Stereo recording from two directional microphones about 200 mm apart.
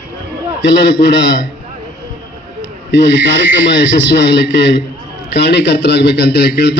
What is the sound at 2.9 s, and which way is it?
Speech, 60° left (ahead or behind).